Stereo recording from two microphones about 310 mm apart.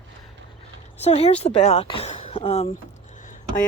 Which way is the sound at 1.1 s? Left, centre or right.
Centre.